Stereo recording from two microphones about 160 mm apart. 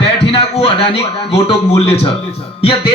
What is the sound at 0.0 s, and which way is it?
Speech, 35° left (ahead or behind).